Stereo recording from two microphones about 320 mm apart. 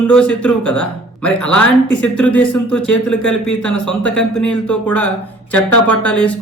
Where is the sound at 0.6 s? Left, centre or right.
Left.